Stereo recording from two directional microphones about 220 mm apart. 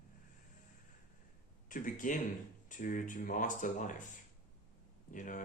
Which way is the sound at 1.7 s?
35° left (ahead or behind).